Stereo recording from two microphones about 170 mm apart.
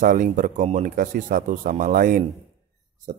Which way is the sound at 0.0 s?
50° right (ahead or behind).